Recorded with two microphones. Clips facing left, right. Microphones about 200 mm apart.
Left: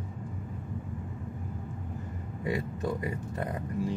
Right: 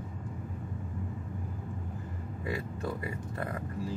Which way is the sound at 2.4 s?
20° left (ahead or behind).